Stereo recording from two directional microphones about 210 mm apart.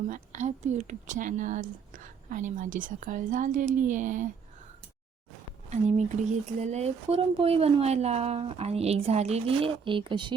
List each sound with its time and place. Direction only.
0.1 s speech: 35° right (ahead or behind)
5.7 s speech: 35° right (ahead or behind)